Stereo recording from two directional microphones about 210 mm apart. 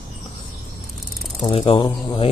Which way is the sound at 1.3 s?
25° left (ahead or behind).